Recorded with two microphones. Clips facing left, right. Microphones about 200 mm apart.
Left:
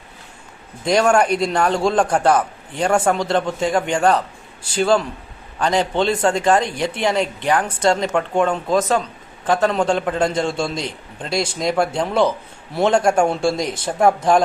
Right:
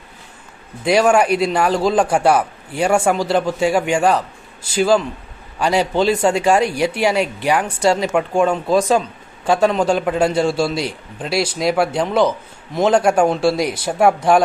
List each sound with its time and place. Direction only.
0.9 s a woman's voice: 5° right (ahead or behind)